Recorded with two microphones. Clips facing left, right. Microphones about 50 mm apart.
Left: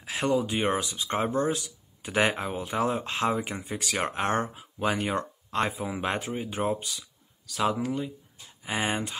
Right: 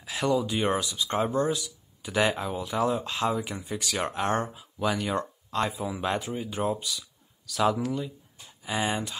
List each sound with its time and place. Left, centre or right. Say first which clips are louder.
0.0 s speech: even; left
5.7 s speech: right 1 dB; left
7.4 s speech: right 2 dB; centre
7.7 s speech: even; left
8.6 s speech: even; left